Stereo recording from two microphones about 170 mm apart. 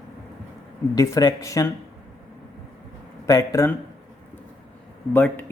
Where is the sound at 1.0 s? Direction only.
20° left (ahead or behind).